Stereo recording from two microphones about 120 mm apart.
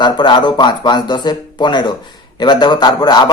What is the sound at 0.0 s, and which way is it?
A man's voice, 40° left (ahead or behind).